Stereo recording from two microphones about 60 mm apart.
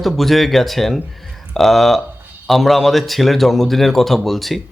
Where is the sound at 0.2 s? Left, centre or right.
Centre.